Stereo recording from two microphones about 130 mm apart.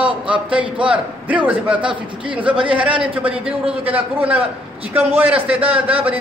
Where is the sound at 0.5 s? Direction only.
40° right (ahead or behind).